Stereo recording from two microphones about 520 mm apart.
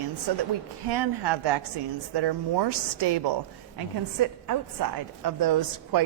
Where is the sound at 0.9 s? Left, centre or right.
Right.